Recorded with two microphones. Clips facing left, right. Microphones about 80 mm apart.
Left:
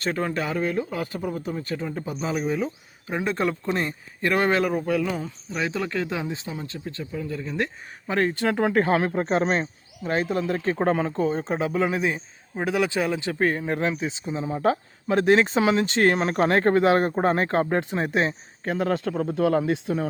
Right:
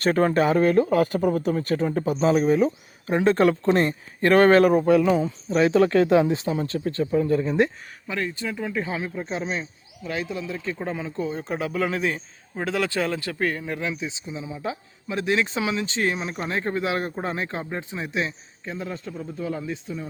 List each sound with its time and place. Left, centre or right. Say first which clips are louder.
0.0 s speech: right 7 dB; right
5.1 s speech: right 8 dB; right
8.0 s speech: left 5 dB; left
8.4 s speech: left 7 dB; left
10.0 s speech: left 5 dB; left
11.2 s speech: left 3 dB; left
13.7 s speech: left 4 dB; left
18.6 s speech: left 8 dB; left